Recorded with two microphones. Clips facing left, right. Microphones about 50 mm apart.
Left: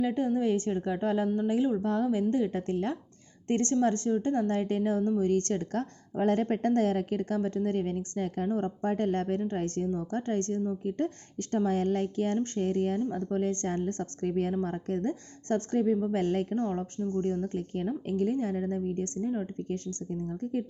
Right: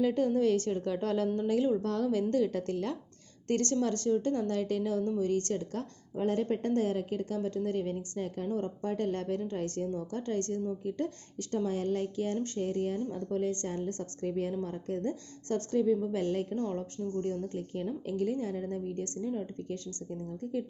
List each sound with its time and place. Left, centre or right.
0.0 s a woman's voice: centre; by 16.6 s left
16.6 s a woman's voice: left
17.4 s a woman's voice: left